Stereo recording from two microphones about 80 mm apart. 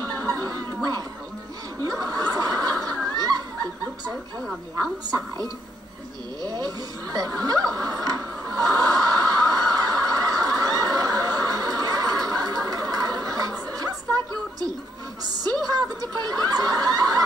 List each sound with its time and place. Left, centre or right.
0.3 s a sound: right
1.8 s snicker: right
5.0 s a woman's voice: right
6.4 s television: right
15.2 s snicker: right